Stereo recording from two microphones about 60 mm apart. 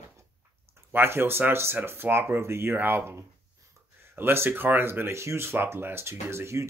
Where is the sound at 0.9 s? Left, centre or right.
Right.